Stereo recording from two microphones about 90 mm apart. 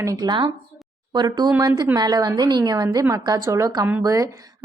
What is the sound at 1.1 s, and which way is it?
A woman's voice, 50° right (ahead or behind).